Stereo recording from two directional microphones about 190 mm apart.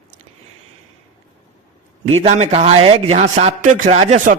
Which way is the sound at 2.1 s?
35° right (ahead or behind).